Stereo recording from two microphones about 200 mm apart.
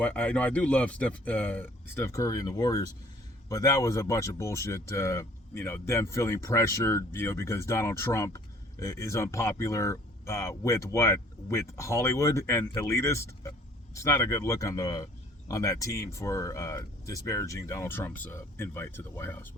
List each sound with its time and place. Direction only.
0.0 s speech: 5° left (ahead or behind)